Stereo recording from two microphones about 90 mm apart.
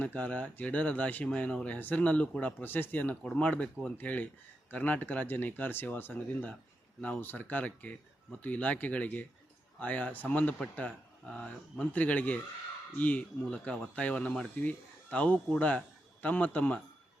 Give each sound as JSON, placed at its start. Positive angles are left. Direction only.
{"t": 0.0, "sound": "speech", "side_deg": 15}